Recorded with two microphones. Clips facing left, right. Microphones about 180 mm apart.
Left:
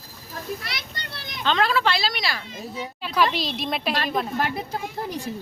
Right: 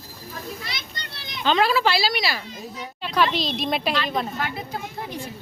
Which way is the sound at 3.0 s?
5° left (ahead or behind).